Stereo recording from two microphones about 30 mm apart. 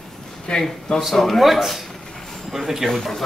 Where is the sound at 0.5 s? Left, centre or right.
Left.